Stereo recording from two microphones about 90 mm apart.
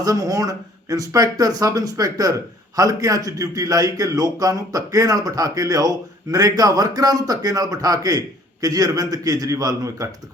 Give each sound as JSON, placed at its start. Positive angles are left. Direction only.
{"t": 0.0, "sound": "a man's voice", "side_deg": -40}